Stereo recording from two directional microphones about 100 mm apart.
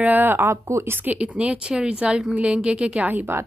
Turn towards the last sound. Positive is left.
turn(degrees=-20)  # may be behind; listen again after turning